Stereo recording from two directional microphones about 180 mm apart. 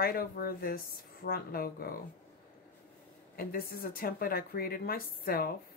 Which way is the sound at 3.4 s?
55° left (ahead or behind).